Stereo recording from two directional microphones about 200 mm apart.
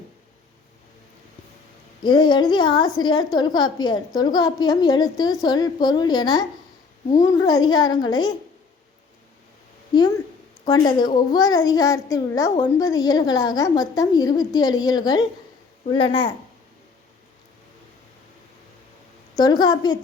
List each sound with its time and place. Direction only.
2.0 s a child's voice: 20° left (ahead or behind)
10.7 s a child's voice: 20° left (ahead or behind)
19.4 s a child's voice: 20° left (ahead or behind)